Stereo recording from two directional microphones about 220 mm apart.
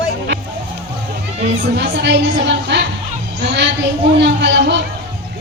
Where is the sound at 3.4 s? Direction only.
50° right (ahead or behind).